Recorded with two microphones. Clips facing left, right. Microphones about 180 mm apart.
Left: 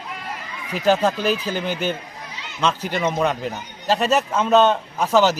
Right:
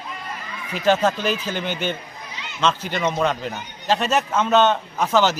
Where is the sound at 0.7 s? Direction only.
5° left (ahead or behind).